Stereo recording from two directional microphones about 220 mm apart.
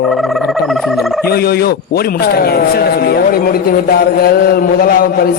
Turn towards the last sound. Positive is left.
turn(degrees=45)  # may be behind; listen again after turning